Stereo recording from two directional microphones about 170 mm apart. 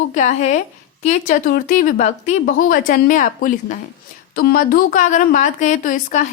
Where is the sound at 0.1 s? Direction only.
45° left (ahead or behind).